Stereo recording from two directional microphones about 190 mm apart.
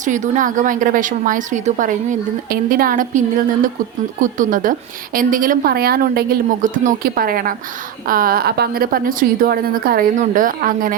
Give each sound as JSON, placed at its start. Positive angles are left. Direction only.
{"t": 0.0, "sound": "a woman's voice", "side_deg": -40}